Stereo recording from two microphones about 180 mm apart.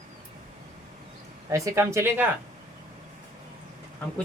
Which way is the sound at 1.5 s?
15° right (ahead or behind).